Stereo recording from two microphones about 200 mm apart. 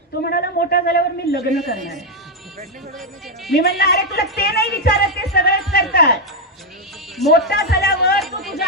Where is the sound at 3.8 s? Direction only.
50° left (ahead or behind).